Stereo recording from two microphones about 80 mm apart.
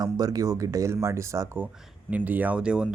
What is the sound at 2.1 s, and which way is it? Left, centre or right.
Speech, right.